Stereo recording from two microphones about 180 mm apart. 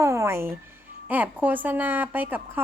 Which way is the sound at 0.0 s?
15° right (ahead or behind).